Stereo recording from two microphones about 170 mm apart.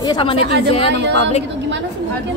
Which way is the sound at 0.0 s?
30° left (ahead or behind).